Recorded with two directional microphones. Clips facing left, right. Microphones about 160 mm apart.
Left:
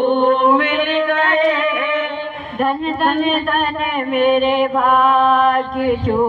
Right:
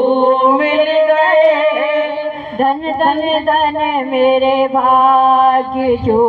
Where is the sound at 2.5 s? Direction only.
45° right (ahead or behind).